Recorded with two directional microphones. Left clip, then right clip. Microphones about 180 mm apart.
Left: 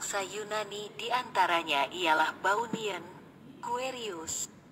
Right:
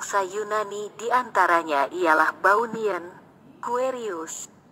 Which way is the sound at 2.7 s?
70° right (ahead or behind).